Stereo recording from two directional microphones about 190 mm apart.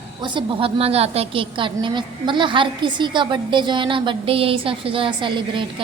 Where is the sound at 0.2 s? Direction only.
25° right (ahead or behind).